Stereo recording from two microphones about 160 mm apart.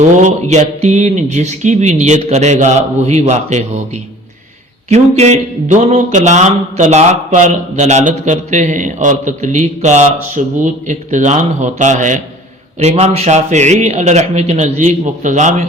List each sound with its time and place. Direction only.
0.2 s speech: 45° right (ahead or behind)
4.9 s speech: 45° right (ahead or behind)